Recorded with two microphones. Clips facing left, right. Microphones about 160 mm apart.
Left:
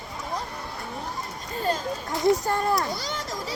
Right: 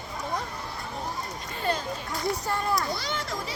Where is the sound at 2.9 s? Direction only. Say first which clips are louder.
Even; 40° left (ahead or behind).